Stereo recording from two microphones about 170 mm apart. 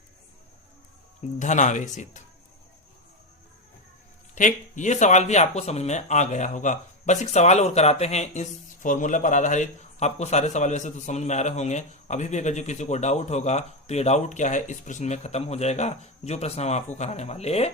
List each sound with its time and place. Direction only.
1.4 s speech: 45° left (ahead or behind)
4.4 s speech: 45° left (ahead or behind)